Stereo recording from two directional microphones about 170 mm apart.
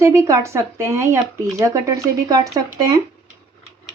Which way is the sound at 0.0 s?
15° right (ahead or behind).